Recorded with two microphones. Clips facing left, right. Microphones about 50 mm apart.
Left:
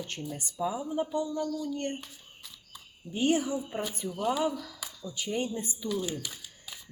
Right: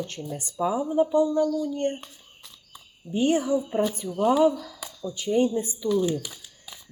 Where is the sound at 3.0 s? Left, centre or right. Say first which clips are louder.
Right 8 dB; right.